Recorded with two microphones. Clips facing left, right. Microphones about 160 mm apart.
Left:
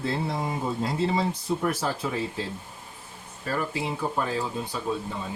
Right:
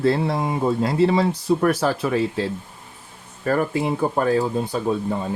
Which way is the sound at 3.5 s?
55° right (ahead or behind).